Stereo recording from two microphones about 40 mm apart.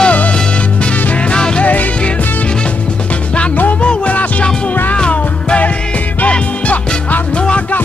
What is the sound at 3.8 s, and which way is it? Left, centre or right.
Music, left.